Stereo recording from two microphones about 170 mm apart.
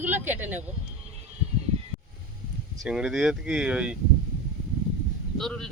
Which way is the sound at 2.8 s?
5° right (ahead or behind).